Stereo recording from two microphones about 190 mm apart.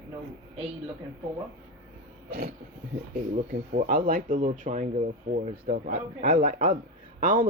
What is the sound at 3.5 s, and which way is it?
Speech, 45° right (ahead or behind).